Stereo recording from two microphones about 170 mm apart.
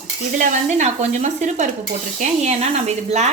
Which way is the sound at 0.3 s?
45° right (ahead or behind).